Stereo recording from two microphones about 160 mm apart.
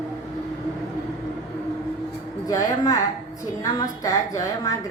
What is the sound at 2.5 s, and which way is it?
A woman's voice, 25° left (ahead or behind).